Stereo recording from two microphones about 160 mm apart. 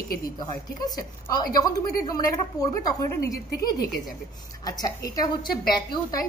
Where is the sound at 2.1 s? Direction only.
20° left (ahead or behind).